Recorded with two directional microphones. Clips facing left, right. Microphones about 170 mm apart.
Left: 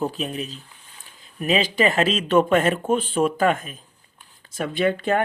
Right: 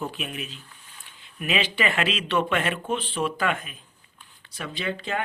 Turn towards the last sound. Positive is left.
turn(degrees=50)  # may be behind; listen again after turning